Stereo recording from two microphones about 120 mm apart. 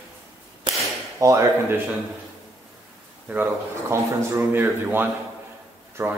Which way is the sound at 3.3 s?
20° right (ahead or behind).